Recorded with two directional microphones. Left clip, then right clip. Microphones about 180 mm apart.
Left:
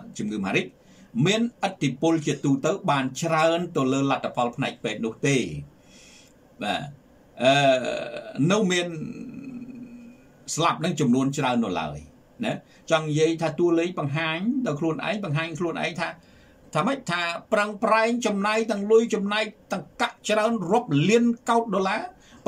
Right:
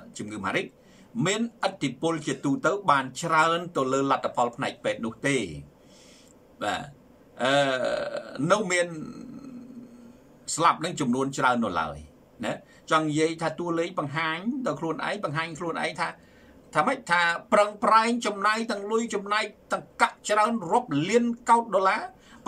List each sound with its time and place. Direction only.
0.1 s a man's voice: 15° left (ahead or behind)
7.3 s a man's voice: 15° left (ahead or behind)
10.5 s a man's voice: 15° left (ahead or behind)